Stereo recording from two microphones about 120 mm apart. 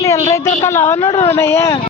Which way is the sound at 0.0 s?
25° left (ahead or behind).